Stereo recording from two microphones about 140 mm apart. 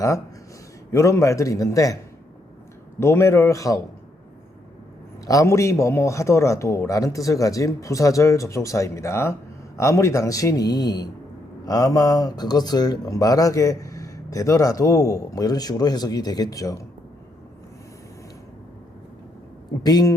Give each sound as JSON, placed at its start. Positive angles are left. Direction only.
{"t": 0.9, "sound": "speech", "side_deg": 20}
{"t": 3.0, "sound": "speech", "side_deg": 20}
{"t": 5.2, "sound": "speech", "side_deg": 25}
{"t": 19.8, "sound": "speech", "side_deg": 30}